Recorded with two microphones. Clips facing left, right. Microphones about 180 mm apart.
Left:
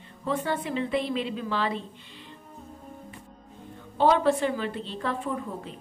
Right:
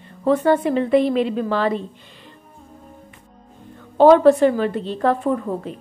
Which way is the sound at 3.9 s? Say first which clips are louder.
Right 11 dB; 45° right (ahead or behind).